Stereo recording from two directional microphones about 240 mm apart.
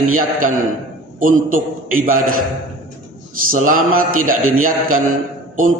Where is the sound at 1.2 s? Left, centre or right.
Right.